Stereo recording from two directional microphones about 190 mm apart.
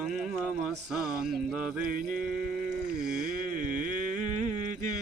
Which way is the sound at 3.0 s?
5° right (ahead or behind).